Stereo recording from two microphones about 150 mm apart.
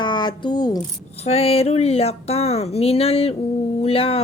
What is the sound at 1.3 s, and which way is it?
Speech, 40° left (ahead or behind).